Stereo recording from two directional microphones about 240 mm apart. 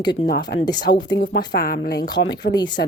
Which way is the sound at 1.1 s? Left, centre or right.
Left.